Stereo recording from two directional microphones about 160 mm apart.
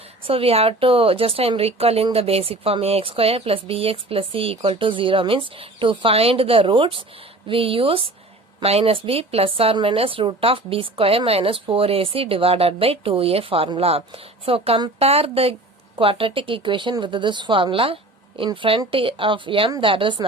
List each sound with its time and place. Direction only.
0.3 s a woman's voice: 35° right (ahead or behind)